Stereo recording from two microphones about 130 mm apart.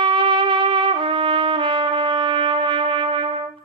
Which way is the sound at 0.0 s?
40° right (ahead or behind).